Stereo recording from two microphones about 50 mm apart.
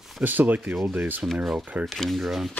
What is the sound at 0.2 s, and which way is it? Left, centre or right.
Speech, right.